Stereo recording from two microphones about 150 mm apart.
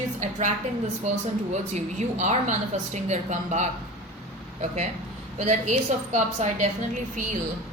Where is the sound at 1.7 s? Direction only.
50° right (ahead or behind).